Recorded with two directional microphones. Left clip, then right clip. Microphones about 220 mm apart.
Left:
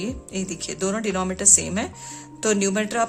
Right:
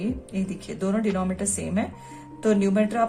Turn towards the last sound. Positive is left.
turn(degrees=40)  # may be behind; listen again after turning